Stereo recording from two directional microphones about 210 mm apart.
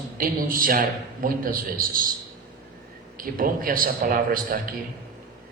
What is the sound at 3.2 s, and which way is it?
A man's voice, 40° right (ahead or behind).